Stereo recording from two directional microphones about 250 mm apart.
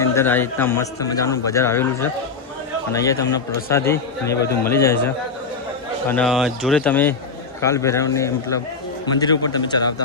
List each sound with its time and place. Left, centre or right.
0.0 s a man's voice: centre